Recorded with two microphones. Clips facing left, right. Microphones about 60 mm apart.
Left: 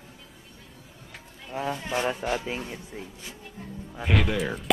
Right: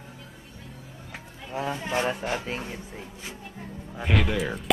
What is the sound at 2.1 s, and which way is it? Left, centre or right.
Music, centre.